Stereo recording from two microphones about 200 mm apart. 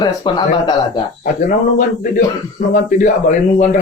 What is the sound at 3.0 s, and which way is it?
Speech, 40° left (ahead or behind).